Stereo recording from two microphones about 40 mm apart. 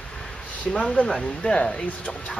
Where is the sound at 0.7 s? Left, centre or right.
Left.